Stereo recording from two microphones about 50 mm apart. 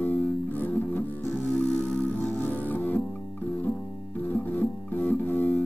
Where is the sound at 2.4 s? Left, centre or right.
Left.